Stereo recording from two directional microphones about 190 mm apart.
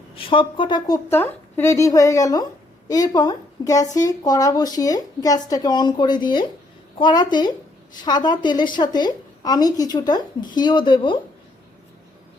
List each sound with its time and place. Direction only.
0.2 s a woman's voice: 25° left (ahead or behind)
1.1 s a woman's voice: 10° left (ahead or behind)